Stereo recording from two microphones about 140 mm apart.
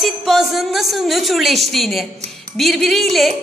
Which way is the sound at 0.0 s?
Centre (ahead or behind).